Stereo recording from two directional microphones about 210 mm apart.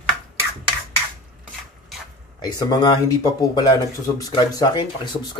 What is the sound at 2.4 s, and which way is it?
Speech, 20° left (ahead or behind).